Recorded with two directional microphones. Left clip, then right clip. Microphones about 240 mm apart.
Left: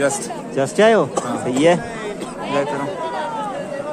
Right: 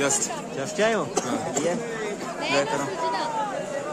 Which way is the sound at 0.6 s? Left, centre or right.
Left.